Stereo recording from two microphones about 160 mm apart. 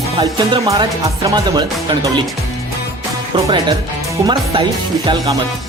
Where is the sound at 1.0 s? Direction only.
20° right (ahead or behind).